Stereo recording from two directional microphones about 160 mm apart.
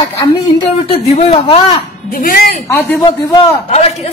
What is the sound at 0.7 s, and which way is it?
A woman's voice, 40° left (ahead or behind).